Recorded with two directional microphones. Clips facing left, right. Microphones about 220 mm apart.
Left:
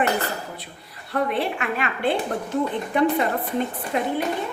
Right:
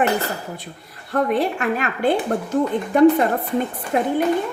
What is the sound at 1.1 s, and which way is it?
A woman's voice, 45° right (ahead or behind).